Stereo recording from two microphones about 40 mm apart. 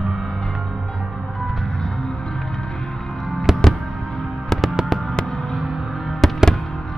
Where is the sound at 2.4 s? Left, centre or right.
Centre.